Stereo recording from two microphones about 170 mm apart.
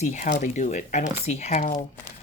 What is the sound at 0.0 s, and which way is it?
Speech, 45° left (ahead or behind).